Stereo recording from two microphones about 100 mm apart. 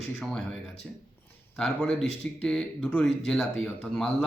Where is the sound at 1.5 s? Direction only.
5° left (ahead or behind).